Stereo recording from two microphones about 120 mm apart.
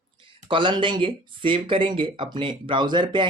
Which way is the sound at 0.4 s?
45° right (ahead or behind).